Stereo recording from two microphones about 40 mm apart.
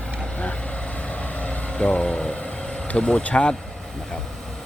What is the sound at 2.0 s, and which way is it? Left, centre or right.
Speech, left.